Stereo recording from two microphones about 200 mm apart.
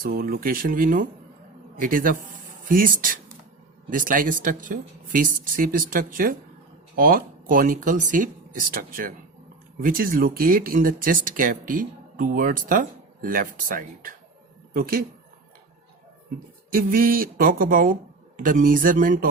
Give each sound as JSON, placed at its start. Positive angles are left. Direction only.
{"t": 0.0, "sound": "speech", "side_deg": -50}
{"t": 16.7, "sound": "speech", "side_deg": -45}